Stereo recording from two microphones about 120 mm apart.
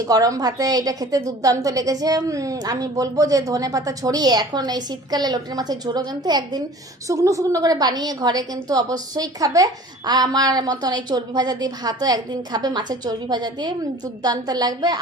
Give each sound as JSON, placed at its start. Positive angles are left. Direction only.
{"t": 0.0, "sound": "a woman's voice", "side_deg": -30}